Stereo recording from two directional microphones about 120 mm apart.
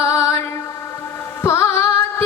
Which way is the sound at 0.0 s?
25° left (ahead or behind).